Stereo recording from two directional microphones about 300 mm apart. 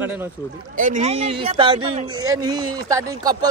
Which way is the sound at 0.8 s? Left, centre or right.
Right.